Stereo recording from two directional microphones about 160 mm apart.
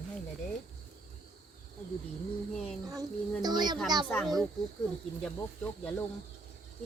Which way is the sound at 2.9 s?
25° right (ahead or behind).